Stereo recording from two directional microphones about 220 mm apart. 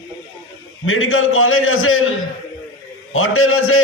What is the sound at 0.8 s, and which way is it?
A man's voice, 70° left (ahead or behind).